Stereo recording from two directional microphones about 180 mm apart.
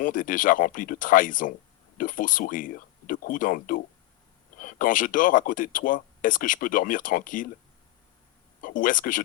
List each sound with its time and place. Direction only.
0.0 s speech: 50° left (ahead or behind)
8.6 s speech: 50° left (ahead or behind)